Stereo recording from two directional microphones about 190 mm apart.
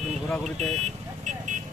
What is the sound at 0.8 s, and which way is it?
Vehicle, 35° right (ahead or behind).